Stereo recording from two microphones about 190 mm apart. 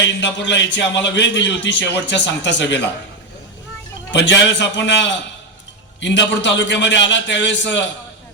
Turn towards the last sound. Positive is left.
turn(degrees=70)  # may be behind; listen again after turning